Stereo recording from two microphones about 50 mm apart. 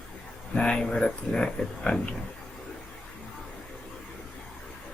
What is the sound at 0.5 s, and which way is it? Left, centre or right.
Speech, centre.